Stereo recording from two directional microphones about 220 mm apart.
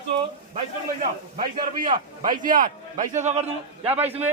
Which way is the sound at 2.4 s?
40° right (ahead or behind).